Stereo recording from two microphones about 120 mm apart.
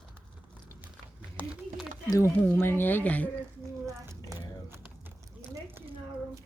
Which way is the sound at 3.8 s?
25° right (ahead or behind).